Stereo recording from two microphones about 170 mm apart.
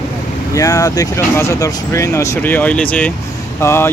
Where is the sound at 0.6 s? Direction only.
20° left (ahead or behind).